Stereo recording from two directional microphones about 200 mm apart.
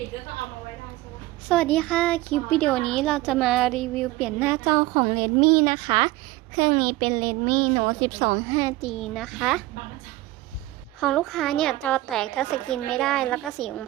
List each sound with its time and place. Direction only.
1.5 s a woman's voice: 5° left (ahead or behind); by 8.7 s 20° right (ahead or behind)
8.8 s speech: centre (ahead or behind)
11.0 s speech: centre (ahead or behind)